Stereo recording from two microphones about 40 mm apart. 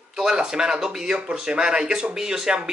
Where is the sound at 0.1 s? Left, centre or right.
Centre.